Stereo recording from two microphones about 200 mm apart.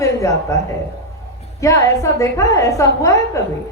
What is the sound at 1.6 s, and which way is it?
Speech, 15° left (ahead or behind).